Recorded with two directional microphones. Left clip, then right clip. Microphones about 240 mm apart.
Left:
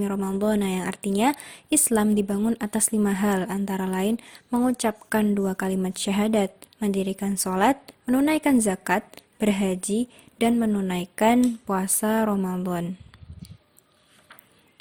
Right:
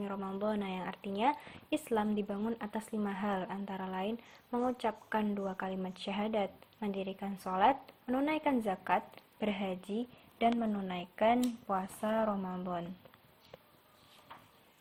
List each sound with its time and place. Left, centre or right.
0.0 s speech: left